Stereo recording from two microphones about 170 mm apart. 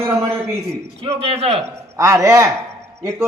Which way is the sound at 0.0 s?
15° right (ahead or behind).